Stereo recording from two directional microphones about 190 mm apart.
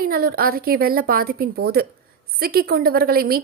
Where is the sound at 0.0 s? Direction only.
50° right (ahead or behind).